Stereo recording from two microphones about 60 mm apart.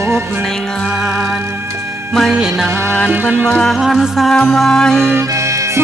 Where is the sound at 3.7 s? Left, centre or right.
Centre.